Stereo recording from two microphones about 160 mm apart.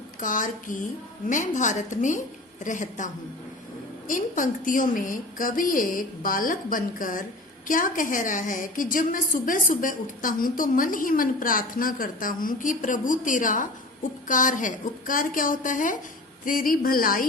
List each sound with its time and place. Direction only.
0.2 s a woman's voice: 55° left (ahead or behind)
4.1 s a woman's voice: 55° left (ahead or behind)